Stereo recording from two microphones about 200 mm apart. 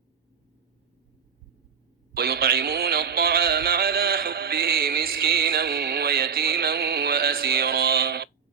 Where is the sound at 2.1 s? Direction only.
50° right (ahead or behind).